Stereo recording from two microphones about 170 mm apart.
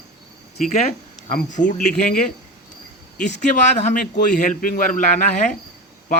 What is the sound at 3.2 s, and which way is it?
Speech, 50° left (ahead or behind).